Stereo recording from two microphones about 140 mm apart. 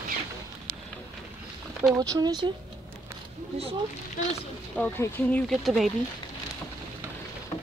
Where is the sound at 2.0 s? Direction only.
30° right (ahead or behind).